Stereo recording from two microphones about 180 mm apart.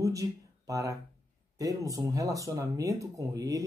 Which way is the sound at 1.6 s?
20° right (ahead or behind).